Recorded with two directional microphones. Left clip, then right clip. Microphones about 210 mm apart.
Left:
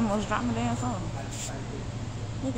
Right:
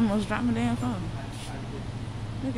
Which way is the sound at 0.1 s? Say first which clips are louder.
Even; 40° right (ahead or behind).